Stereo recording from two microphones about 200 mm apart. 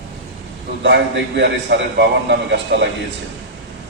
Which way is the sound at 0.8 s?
60° right (ahead or behind).